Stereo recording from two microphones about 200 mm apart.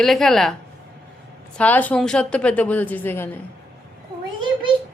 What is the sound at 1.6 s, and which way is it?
A woman's voice, 10° left (ahead or behind).